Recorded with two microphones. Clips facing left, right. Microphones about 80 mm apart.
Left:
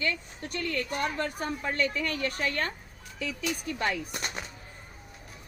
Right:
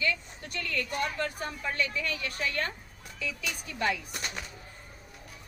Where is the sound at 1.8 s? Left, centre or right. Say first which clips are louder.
Left 3 dB; left.